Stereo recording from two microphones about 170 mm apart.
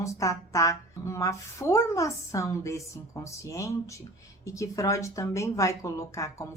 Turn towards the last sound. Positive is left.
turn(degrees=15)  # may be behind; listen again after turning